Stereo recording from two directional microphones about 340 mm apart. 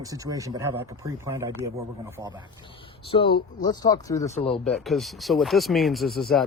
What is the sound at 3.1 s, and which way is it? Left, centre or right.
Speech, centre.